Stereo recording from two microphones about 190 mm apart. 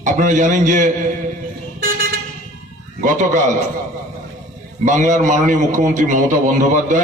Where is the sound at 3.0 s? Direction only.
40° right (ahead or behind).